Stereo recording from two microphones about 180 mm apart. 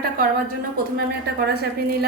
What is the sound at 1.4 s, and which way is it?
Speech, 60° right (ahead or behind).